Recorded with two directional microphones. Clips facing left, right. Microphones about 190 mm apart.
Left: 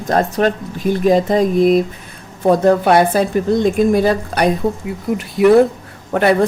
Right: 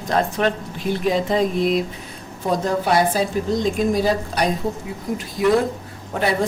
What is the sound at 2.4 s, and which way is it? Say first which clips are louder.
A woman's voice: left 9 dB; 60° left (ahead or behind).